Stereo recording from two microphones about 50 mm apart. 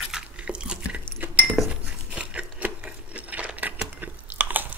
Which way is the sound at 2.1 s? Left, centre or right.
Right.